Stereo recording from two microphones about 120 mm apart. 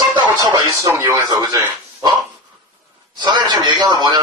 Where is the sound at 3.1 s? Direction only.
40° right (ahead or behind).